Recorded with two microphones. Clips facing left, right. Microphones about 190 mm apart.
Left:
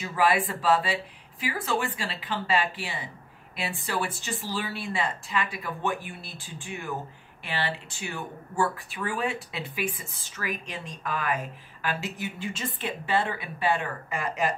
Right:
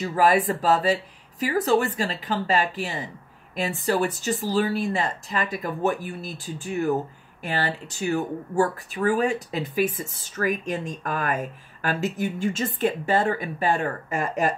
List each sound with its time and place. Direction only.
0.0 s speech: 40° right (ahead or behind)